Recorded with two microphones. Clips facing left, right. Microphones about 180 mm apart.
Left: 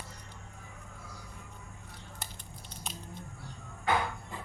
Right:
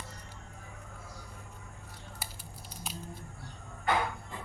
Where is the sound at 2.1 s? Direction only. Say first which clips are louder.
Even; 5° right (ahead or behind).